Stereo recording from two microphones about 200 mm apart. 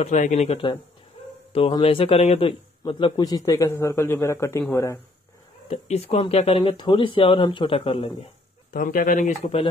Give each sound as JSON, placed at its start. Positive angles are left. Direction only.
{"t": 0.0, "sound": "a man's voice", "side_deg": 35}
{"t": 5.7, "sound": "speech", "side_deg": 30}
{"t": 8.7, "sound": "speech", "side_deg": 45}